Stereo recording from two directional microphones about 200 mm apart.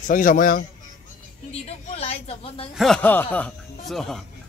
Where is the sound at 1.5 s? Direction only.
30° left (ahead or behind).